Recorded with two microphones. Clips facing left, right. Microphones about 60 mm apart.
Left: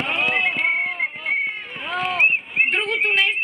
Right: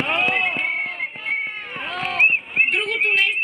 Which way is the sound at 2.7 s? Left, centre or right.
Left.